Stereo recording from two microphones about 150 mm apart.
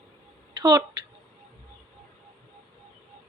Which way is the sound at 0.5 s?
30° right (ahead or behind).